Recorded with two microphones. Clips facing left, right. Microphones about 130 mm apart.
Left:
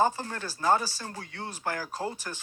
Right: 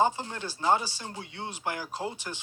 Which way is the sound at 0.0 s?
20° right (ahead or behind).